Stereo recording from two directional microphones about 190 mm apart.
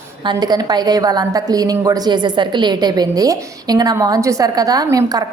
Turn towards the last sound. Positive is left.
turn(degrees=-20)  # may be behind; listen again after turning